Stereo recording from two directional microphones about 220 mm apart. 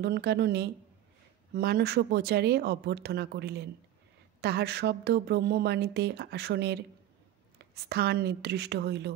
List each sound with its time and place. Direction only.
0.0 s a woman's voice: 50° right (ahead or behind)